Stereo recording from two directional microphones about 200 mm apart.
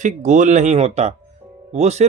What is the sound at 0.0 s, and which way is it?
Speech, 40° right (ahead or behind).